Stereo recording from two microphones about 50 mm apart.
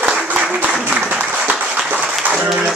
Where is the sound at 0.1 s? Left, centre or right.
Centre.